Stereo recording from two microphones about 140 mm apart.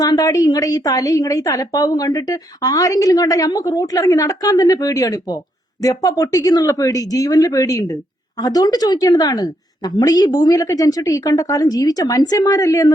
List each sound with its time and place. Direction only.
0.0 s a woman's voice: 25° left (ahead or behind)